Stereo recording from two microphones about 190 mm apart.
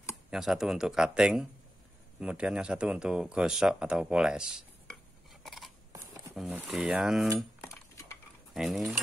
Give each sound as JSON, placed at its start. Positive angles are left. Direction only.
{"t": 0.3, "sound": "speech", "side_deg": 0}
{"t": 5.4, "sound": "scissors", "side_deg": 0}
{"t": 6.3, "sound": "speech", "side_deg": 0}
{"t": 8.5, "sound": "speech", "side_deg": 0}